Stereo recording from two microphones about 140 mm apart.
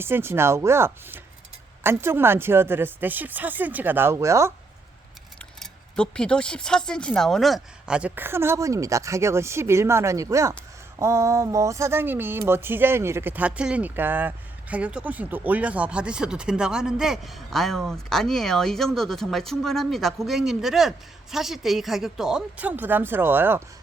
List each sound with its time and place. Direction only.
0.0 s speech: 15° right (ahead or behind)
5.5 s speech: 5° left (ahead or behind); by 23.6 s 15° right (ahead or behind)